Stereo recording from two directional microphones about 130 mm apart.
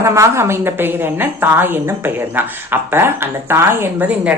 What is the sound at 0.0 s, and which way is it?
Speech, 20° right (ahead or behind).